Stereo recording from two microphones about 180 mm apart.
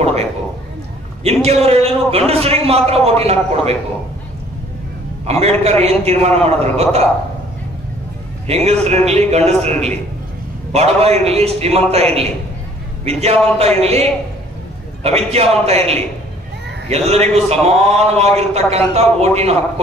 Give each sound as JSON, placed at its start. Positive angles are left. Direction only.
{"t": 0.0, "sound": "a sound", "side_deg": -35}
{"t": 1.2, "sound": "a man's voice", "side_deg": -35}
{"t": 5.2, "sound": "a man's voice", "side_deg": -35}
{"t": 8.5, "sound": "a man's voice", "side_deg": -35}
{"t": 15.0, "sound": "a man's voice", "side_deg": -35}